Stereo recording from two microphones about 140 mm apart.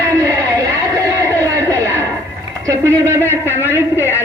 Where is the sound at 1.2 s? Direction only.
25° right (ahead or behind).